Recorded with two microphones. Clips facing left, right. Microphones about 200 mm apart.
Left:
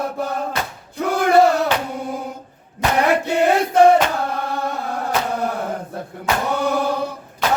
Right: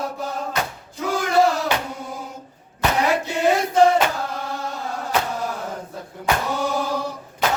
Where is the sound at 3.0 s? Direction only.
60° left (ahead or behind).